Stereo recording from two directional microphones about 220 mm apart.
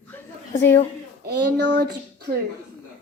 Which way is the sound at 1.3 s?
50° right (ahead or behind).